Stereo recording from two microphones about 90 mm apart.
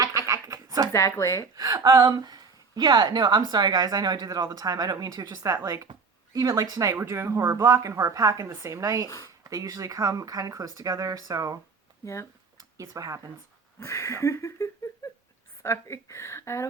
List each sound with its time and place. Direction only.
0.0 s a sound: 40° right (ahead or behind)
0.9 s a woman's voice: 35° left (ahead or behind)
1.5 s a woman's voice: 45° right (ahead or behind)
6.9 s a woman's voice: 25° right (ahead or behind)
9.0 s a woman's voice: 40° left (ahead or behind)
9.4 s a woman's voice: 40° right (ahead or behind)
12.5 s speech: 40° right (ahead or behind)
13.7 s a woman's voice: 30° left (ahead or behind)